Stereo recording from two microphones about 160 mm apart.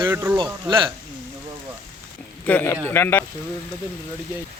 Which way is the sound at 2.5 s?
10° left (ahead or behind).